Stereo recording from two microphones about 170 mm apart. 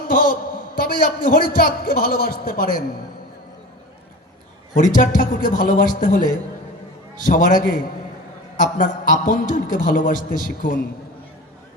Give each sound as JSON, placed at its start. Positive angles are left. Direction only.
{"t": 0.1, "sound": "a man's voice", "side_deg": 55}
{"t": 4.7, "sound": "a man's voice", "side_deg": 50}
{"t": 7.3, "sound": "a man's voice", "side_deg": 50}